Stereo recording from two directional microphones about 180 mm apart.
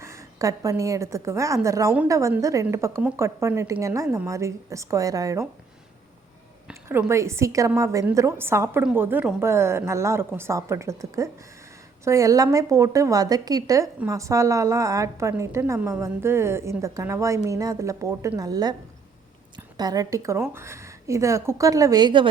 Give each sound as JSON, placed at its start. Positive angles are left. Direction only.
{"t": 0.0, "sound": "a woman's voice", "side_deg": -15}
{"t": 6.7, "sound": "a woman's voice", "side_deg": -15}